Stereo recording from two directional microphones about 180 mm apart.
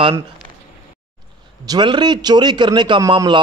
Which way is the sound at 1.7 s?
25° right (ahead or behind).